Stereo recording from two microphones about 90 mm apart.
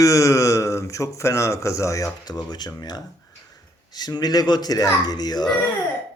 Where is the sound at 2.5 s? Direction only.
50° left (ahead or behind).